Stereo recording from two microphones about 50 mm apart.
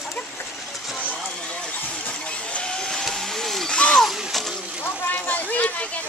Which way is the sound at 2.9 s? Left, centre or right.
Centre.